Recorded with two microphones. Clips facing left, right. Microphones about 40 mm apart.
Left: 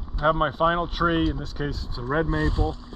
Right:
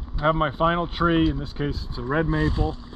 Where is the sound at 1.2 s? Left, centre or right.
Right.